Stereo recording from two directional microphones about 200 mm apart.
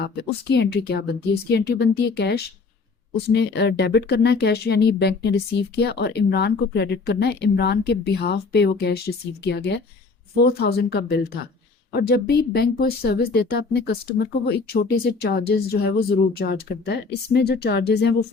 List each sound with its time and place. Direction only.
0.4 s speech: 60° left (ahead or behind)